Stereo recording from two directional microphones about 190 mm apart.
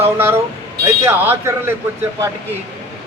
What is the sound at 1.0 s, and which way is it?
Speech, 15° right (ahead or behind).